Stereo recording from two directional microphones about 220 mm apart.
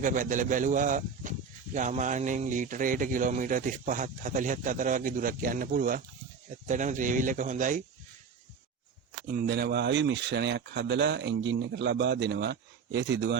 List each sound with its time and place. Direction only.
0.0 s speech: 35° right (ahead or behind)
9.2 s speech: 40° right (ahead or behind)